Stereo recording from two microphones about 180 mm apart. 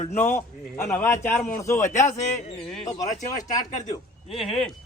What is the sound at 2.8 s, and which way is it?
Speech, 40° left (ahead or behind).